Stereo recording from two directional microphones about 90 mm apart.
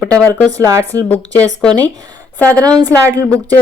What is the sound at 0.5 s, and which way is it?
Speech, 40° right (ahead or behind).